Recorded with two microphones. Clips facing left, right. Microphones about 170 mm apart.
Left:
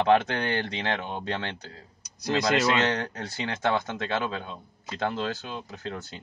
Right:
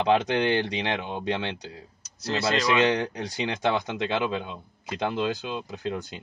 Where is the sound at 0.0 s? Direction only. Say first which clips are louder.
Even; 15° right (ahead or behind).